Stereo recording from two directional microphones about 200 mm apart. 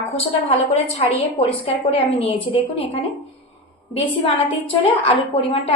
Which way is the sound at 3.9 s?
30° left (ahead or behind).